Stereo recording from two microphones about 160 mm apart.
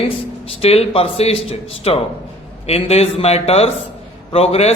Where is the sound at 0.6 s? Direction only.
40° left (ahead or behind).